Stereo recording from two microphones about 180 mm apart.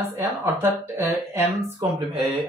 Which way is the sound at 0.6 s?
10° right (ahead or behind).